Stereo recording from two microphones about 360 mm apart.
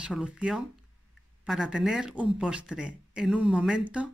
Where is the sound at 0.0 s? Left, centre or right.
Centre.